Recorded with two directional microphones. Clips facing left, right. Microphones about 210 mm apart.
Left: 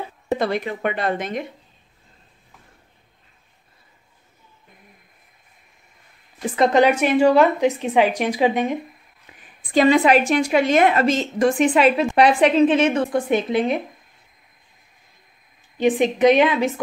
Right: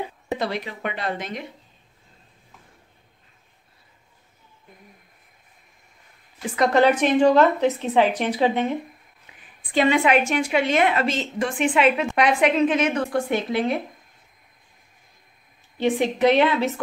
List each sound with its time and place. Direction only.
0.4 s speech: 50° left (ahead or behind)
6.4 s a woman's voice: 30° left (ahead or behind)
6.7 s a woman's voice: 10° left (ahead or behind)
9.6 s a woman's voice: 40° left (ahead or behind); by 13.8 s 20° left (ahead or behind)
15.8 s a woman's voice: 15° left (ahead or behind)